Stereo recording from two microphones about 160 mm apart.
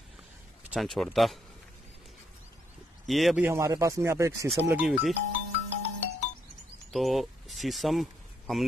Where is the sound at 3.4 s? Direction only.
15° right (ahead or behind).